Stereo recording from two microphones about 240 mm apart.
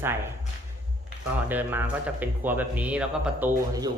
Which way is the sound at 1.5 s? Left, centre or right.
Centre.